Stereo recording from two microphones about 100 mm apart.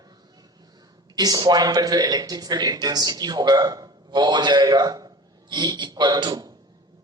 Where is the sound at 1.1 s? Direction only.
40° right (ahead or behind).